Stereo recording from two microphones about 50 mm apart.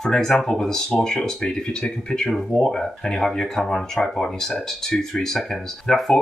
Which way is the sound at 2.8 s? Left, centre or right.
Centre.